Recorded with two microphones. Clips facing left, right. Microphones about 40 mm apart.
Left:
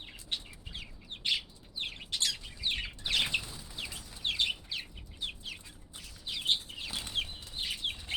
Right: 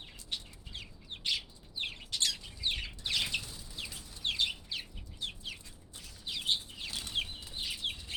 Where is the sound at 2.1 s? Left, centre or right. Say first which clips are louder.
Left 1 dB; centre.